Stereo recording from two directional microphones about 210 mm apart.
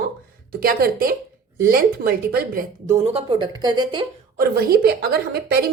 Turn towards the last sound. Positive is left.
turn(degrees=-50)  # may be behind; listen again after turning